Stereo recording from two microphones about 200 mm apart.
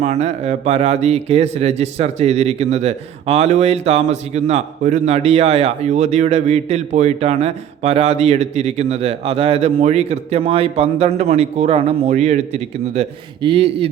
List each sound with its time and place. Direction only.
0.0 s speech: 35° right (ahead or behind)